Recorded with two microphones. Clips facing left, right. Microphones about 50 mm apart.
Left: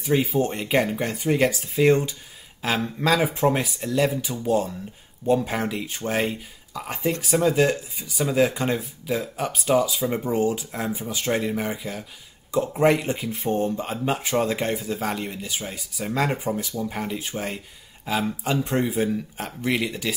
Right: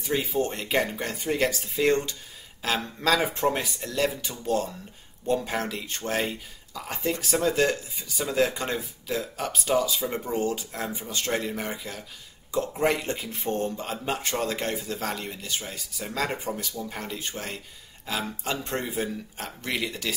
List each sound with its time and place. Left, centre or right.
0.0 s speech: centre